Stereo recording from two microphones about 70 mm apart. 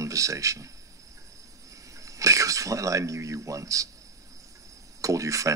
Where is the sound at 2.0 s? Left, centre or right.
Right.